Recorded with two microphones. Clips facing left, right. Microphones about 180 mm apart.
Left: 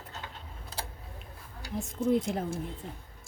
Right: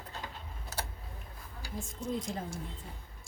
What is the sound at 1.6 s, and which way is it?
Speech, 65° left (ahead or behind).